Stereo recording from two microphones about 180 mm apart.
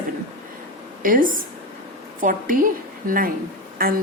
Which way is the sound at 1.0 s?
50° right (ahead or behind).